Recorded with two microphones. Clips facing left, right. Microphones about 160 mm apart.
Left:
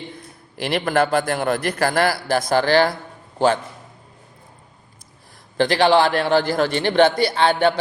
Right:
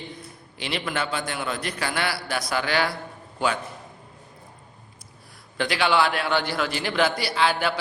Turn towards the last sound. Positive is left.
turn(degrees=30)  # may be behind; listen again after turning